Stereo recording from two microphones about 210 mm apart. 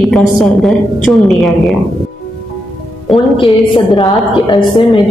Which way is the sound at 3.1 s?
Centre (ahead or behind).